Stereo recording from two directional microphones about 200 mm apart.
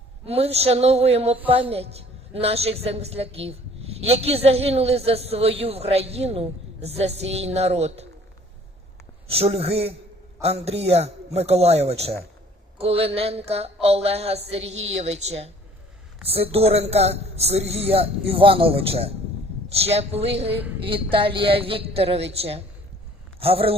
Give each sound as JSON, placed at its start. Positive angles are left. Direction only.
{"t": 0.3, "sound": "a woman's voice", "side_deg": -30}
{"t": 9.2, "sound": "a woman's voice", "side_deg": -30}